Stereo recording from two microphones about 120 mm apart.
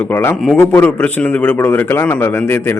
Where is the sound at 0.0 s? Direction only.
20° left (ahead or behind).